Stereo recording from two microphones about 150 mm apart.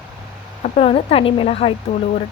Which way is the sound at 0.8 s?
40° left (ahead or behind).